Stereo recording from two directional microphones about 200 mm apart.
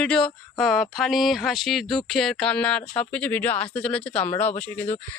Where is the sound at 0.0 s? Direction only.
5° left (ahead or behind).